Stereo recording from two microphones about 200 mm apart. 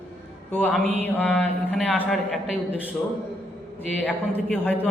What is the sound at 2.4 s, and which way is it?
Speech, 35° right (ahead or behind).